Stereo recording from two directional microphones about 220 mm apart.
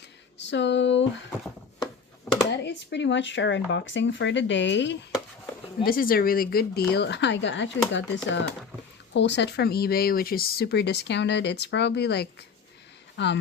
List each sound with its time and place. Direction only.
0.3 s a sound: 55° left (ahead or behind)
2.5 s speech: 50° left (ahead or behind)
5.8 s speech: 40° left (ahead or behind)